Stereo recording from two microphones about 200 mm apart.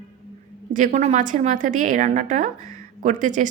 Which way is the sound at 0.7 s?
40° right (ahead or behind).